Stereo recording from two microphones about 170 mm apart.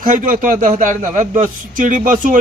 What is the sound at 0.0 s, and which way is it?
A man's voice, 50° right (ahead or behind).